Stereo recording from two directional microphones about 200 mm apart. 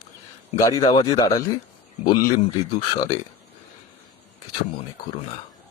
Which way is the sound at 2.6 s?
25° left (ahead or behind).